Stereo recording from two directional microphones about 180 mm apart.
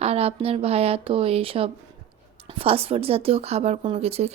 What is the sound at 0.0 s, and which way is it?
Speech, 35° right (ahead or behind).